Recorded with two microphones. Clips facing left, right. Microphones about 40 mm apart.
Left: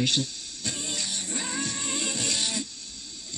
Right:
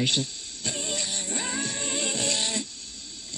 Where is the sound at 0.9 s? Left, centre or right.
Centre.